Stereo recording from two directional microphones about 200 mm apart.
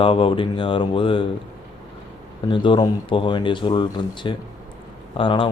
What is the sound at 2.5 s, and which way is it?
Speech, 25° left (ahead or behind).